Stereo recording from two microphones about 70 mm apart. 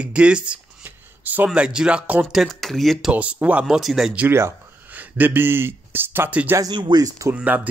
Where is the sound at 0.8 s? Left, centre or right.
Right.